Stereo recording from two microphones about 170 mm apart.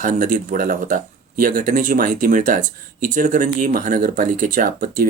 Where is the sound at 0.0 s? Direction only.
50° right (ahead or behind).